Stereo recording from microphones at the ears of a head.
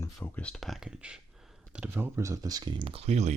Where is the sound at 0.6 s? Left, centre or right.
Centre.